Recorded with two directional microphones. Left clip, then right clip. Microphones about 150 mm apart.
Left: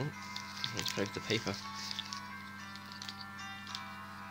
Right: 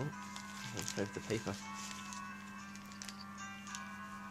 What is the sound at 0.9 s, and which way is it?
Speech, 10° left (ahead or behind).